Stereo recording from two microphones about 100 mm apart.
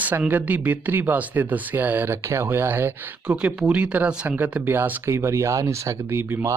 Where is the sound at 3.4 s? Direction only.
10° right (ahead or behind).